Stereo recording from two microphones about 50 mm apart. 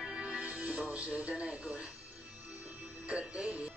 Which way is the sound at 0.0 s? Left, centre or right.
Centre.